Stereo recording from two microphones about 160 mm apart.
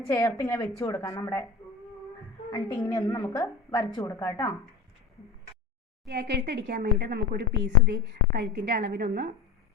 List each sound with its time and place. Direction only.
0.0 s a woman's voice: 20° left (ahead or behind)
2.5 s a woman's voice: 25° left (ahead or behind)
6.1 s speech: 90° right